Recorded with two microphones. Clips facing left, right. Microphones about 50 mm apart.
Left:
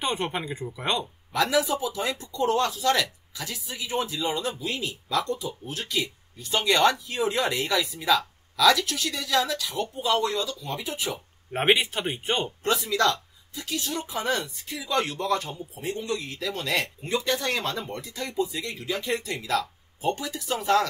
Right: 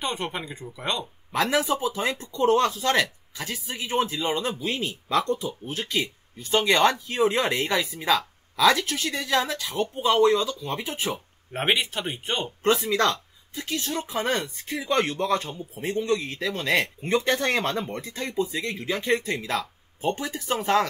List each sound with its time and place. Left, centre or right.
0.0 s speech: centre
1.3 s speech: right
11.5 s speech: centre
12.6 s speech: right